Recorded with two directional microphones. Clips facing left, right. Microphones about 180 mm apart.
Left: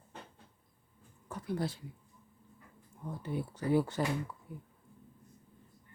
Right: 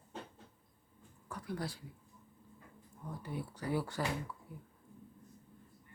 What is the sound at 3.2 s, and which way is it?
Speech, 25° left (ahead or behind).